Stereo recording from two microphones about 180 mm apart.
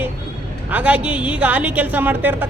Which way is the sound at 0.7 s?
10° right (ahead or behind).